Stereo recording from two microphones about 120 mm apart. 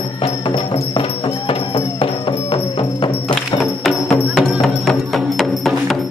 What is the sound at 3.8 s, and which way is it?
Music, centre (ahead or behind).